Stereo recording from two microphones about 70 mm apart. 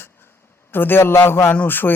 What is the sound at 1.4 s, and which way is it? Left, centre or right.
Music, left.